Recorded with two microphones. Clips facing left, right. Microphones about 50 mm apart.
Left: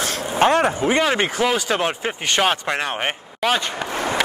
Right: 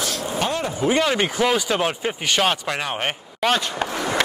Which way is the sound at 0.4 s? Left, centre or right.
Left.